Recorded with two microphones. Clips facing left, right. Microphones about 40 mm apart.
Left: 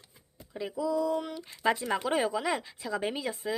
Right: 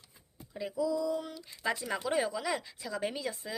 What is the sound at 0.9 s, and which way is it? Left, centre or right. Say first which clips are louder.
Speech: left 3 dB; left.